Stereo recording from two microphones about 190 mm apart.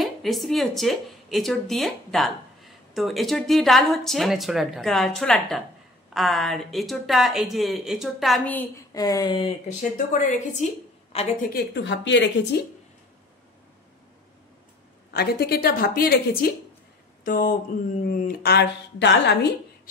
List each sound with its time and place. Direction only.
0.0 s a woman's voice: centre (ahead or behind); by 9.5 s 20° left (ahead or behind)
9.9 s a woman's voice: 40° left (ahead or behind)
11.5 s speech: 65° left (ahead or behind)
15.1 s a woman's voice: 55° left (ahead or behind)
17.2 s a sound: 50° left (ahead or behind)
18.0 s speech: 50° left (ahead or behind); by 19.5 s 65° left (ahead or behind)